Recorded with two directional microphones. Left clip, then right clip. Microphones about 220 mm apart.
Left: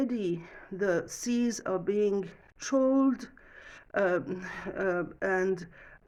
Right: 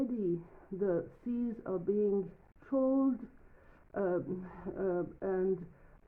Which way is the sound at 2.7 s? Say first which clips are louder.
Left 5 dB; 35° left (ahead or behind).